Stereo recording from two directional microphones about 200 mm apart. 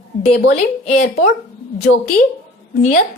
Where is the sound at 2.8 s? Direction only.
45° left (ahead or behind).